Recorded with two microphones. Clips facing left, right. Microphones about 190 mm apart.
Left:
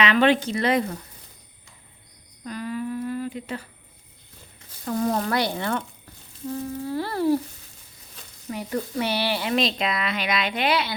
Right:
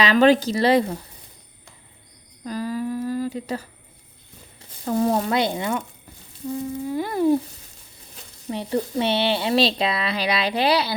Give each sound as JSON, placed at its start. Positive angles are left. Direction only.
{"t": 0.0, "sound": "speech", "side_deg": -35}
{"t": 2.4, "sound": "humming", "side_deg": -35}
{"t": 4.9, "sound": "speech", "side_deg": -25}
{"t": 6.5, "sound": "humming", "side_deg": -15}
{"t": 8.4, "sound": "speech", "side_deg": -25}